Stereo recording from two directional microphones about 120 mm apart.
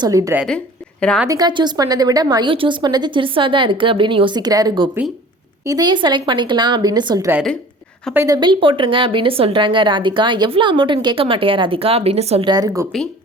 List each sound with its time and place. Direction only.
0.0 s a woman's voice: 30° right (ahead or behind)
2.5 s a woman's voice: 45° right (ahead or behind)
8.3 s a woman's voice: 40° right (ahead or behind); by 12.5 s 60° right (ahead or behind)
12.5 s speech: 30° right (ahead or behind)